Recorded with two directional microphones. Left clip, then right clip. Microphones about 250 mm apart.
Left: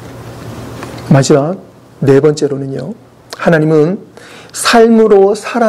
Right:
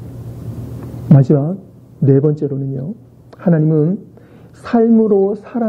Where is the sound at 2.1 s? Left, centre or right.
Centre.